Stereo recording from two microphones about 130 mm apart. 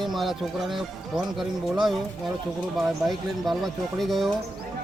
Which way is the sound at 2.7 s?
Centre (ahead or behind).